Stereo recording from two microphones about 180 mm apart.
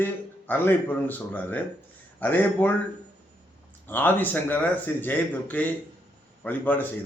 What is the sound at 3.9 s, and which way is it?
A man's voice, 10° left (ahead or behind).